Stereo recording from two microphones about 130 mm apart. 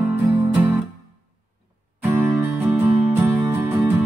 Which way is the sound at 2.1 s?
15° right (ahead or behind).